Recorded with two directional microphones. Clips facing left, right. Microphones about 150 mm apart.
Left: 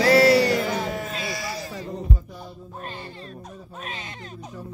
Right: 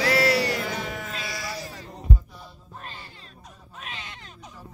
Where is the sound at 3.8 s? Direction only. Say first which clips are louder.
Left 3 dB; 45° left (ahead or behind).